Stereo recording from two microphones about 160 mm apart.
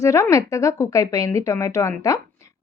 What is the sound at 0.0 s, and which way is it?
A woman's voice, 20° left (ahead or behind).